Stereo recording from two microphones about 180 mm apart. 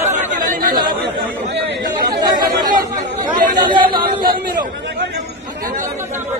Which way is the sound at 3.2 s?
25° right (ahead or behind).